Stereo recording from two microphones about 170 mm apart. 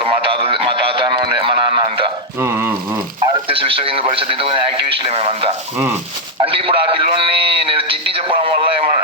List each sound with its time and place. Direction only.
0.0 s radio: 30° right (ahead or behind)
2.4 s a sound: 15° right (ahead or behind)
3.5 s a man's voice: 30° right (ahead or behind)